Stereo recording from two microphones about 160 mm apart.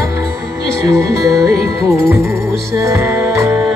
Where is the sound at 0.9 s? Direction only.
20° right (ahead or behind).